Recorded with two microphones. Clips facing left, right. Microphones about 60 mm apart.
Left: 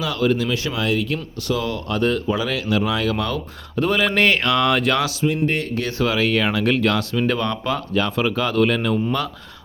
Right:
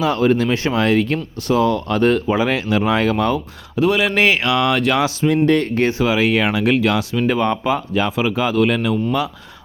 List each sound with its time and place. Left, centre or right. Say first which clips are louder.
0.0 s speech: right 4 dB; right
3.8 s speech: right 3 dB; centre
5.2 s speech: right 5 dB; right
6.0 s speech: left 1 dB; centre